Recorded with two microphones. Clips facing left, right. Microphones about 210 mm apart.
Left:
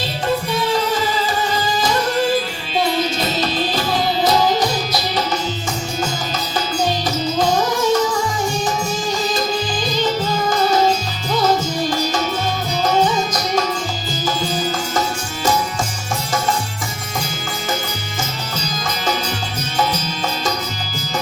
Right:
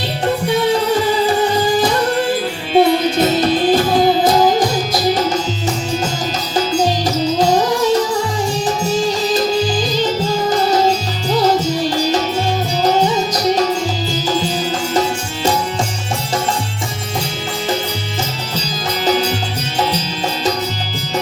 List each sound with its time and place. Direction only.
2.7 s music: 55° right (ahead or behind)
9.9 s music: 35° right (ahead or behind)